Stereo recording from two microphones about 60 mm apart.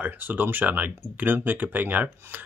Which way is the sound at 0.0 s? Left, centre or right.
Right.